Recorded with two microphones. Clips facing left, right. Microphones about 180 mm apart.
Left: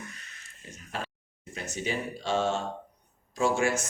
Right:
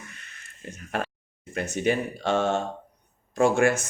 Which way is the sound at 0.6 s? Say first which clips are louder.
Right 7 dB; 55° right (ahead or behind).